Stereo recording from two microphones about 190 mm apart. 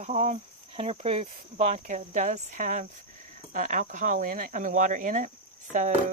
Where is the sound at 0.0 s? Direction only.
35° right (ahead or behind).